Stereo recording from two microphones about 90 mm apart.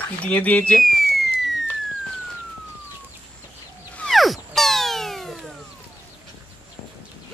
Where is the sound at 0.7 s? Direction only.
Centre (ahead or behind).